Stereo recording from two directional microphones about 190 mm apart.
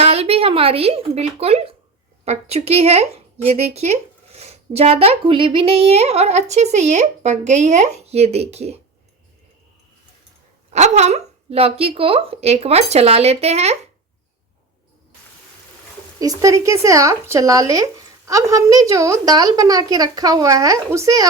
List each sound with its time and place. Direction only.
0.0 s speech: 30° right (ahead or behind)
10.7 s speech: 35° right (ahead or behind)
16.2 s a woman's voice: 15° right (ahead or behind)